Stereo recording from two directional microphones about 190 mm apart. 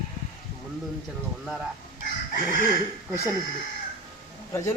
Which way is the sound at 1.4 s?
5° right (ahead or behind).